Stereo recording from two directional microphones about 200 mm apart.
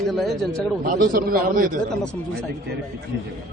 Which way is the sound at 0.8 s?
45° right (ahead or behind).